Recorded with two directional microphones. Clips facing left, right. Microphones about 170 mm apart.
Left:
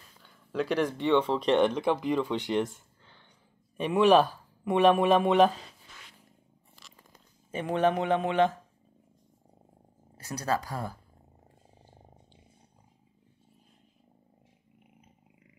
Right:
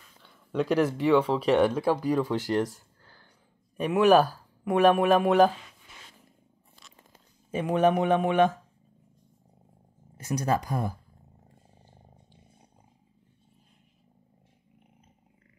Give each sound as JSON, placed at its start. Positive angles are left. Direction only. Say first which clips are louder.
{"t": 0.2, "sound": "a sound", "louder": "right 3 dB", "side_deg": 0}
{"t": 0.7, "sound": "speech", "louder": "right 3 dB", "side_deg": -10}
{"t": 3.7, "sound": "speech", "louder": "right 1 dB", "side_deg": -5}
{"t": 5.5, "sound": "speech", "louder": "even", "side_deg": 35}
{"t": 7.5, "sound": "speech", "louder": "right 3 dB", "side_deg": -15}
{"t": 10.2, "sound": "speech", "louder": "right 3 dB", "side_deg": -20}